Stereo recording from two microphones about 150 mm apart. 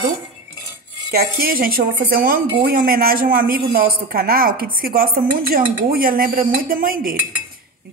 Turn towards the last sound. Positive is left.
turn(degrees=-70)  # may be behind; listen again after turning